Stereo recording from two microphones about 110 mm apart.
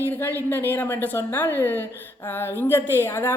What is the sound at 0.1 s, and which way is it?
A woman's voice, 20° left (ahead or behind).